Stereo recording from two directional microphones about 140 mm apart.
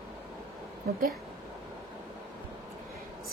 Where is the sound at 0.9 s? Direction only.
90° right.